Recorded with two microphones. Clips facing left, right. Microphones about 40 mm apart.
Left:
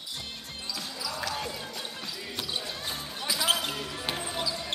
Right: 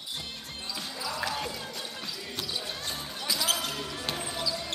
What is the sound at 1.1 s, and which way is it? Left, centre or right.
Basketball bounce, centre.